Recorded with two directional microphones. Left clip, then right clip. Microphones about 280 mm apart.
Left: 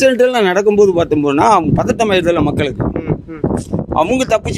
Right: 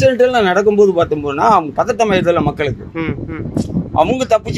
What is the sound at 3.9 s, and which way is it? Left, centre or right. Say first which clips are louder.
Speech: even; left.